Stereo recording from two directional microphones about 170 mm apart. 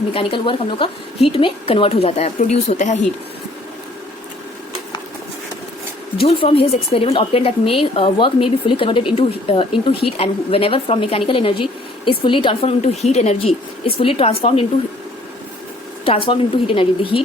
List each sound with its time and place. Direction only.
0.1 s speech: 30° left (ahead or behind)
6.1 s speech: 30° left (ahead or behind)
16.0 s speech: 30° left (ahead or behind)